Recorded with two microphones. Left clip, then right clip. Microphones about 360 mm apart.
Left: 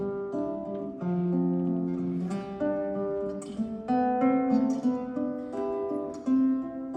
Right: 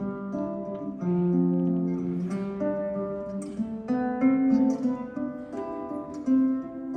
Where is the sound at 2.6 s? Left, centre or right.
Centre.